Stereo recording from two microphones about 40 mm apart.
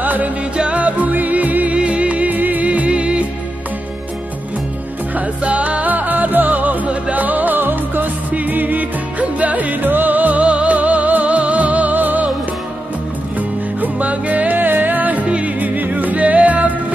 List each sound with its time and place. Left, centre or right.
0.0 s music: right
1.8 s music: right
2.3 s music: right
2.9 s music: right
5.4 s music: right
10.4 s music: right
13.7 s music: right
15.2 s music: right
15.6 s music: right